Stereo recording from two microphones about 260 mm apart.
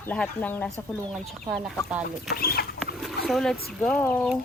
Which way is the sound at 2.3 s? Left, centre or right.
Left.